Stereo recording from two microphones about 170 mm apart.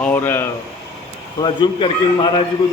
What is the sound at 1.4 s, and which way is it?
A man's voice, 25° left (ahead or behind).